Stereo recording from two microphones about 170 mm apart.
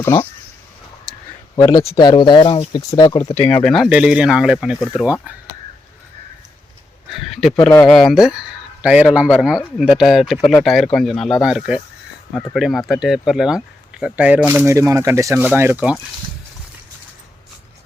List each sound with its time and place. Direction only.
1.5 s speech: 20° left (ahead or behind)
3.5 s speech: centre (ahead or behind)
7.1 s speech: centre (ahead or behind)